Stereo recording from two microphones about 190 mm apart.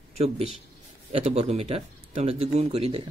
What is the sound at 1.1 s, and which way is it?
A man's voice, 35° right (ahead or behind).